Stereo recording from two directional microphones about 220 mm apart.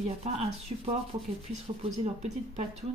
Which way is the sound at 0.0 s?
30° right (ahead or behind).